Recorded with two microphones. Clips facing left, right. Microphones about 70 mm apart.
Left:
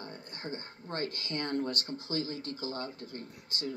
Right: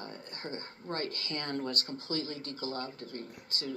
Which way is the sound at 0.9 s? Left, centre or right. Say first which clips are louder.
Left 1 dB; right.